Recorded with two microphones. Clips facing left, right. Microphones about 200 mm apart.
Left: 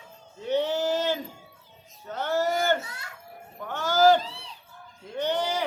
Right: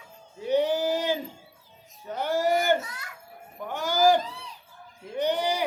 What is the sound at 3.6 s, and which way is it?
Speech, 15° right (ahead or behind).